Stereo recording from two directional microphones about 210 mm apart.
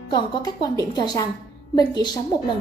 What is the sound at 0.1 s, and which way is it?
A woman's voice, 20° left (ahead or behind).